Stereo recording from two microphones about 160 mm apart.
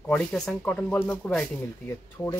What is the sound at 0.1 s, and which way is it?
Speech, 5° left (ahead or behind).